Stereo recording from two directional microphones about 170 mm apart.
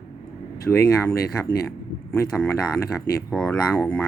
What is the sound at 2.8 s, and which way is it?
Speech, 15° left (ahead or behind).